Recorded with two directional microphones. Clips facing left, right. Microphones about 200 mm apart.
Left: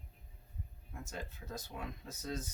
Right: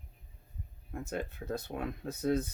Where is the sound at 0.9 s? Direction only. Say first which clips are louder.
Right 9 dB; 60° right (ahead or behind).